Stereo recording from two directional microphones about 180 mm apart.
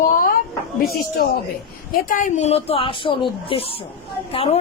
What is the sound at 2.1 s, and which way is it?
A child's voice, 45° left (ahead or behind).